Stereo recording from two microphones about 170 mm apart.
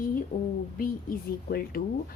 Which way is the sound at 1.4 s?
60° left (ahead or behind).